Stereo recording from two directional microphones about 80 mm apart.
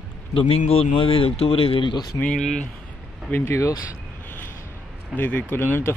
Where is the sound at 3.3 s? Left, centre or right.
Left.